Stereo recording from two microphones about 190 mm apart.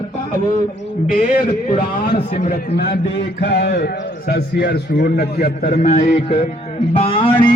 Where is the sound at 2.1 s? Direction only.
35° left (ahead or behind).